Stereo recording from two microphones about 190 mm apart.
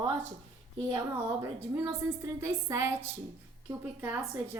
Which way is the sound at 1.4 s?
15° right (ahead or behind).